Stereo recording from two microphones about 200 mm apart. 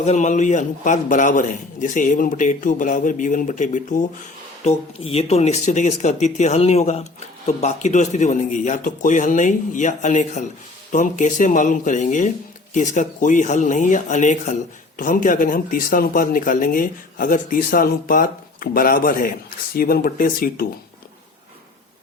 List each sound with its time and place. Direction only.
0.0 s speech: 35° left (ahead or behind)